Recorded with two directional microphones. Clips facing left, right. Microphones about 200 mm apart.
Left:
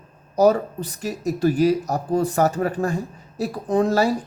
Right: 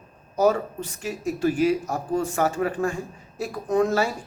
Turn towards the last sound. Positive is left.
turn(degrees=35)  # may be behind; listen again after turning